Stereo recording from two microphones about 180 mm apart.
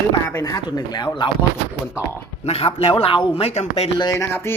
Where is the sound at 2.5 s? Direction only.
35° left (ahead or behind).